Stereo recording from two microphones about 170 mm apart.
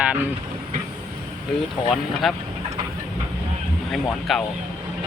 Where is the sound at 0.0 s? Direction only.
10° right (ahead or behind).